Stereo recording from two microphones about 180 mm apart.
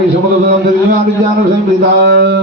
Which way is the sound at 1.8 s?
65° right (ahead or behind).